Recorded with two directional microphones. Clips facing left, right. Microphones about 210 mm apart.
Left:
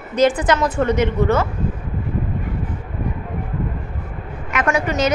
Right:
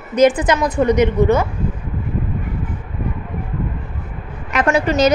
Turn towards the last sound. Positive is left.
turn(degrees=-30)  # may be behind; listen again after turning